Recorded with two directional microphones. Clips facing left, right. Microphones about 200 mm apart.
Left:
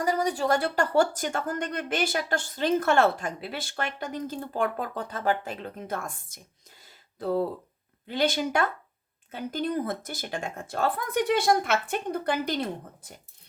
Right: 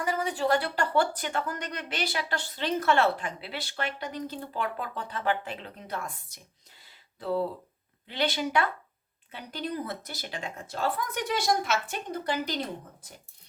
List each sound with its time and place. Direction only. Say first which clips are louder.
0.0 s speech: left 3 dB; 40° left (ahead or behind); by 12.5 s 55° left (ahead or behind)